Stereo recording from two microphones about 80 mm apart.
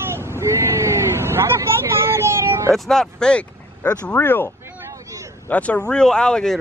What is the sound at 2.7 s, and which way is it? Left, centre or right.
Speech, centre.